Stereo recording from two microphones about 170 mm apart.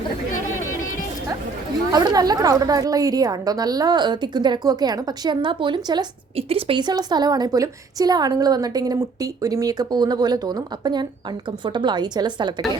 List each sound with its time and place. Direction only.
1.9 s a woman's voice: 25° right (ahead or behind)